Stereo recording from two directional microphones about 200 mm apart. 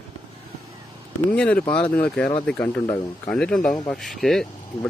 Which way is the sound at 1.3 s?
5° left (ahead or behind).